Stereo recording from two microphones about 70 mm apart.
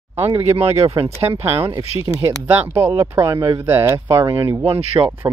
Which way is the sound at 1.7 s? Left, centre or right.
Right.